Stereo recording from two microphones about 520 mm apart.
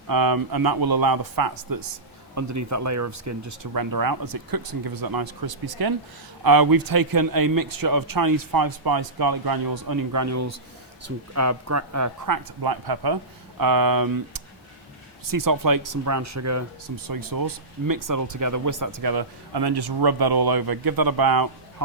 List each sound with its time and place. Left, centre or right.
0.1 s speech: right